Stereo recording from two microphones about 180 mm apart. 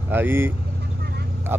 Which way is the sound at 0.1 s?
10° right (ahead or behind).